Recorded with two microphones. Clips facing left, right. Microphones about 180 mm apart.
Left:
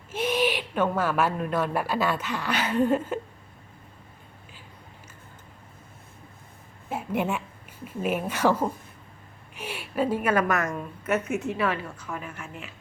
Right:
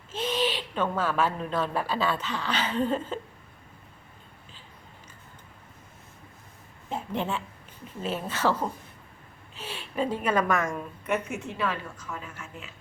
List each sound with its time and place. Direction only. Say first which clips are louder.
0.1 s a woman's voice: left 3 dB; 10° left (ahead or behind)
6.9 s a woman's voice: left 3 dB; 10° left (ahead or behind)
12.2 s speech: left 3 dB; 55° left (ahead or behind)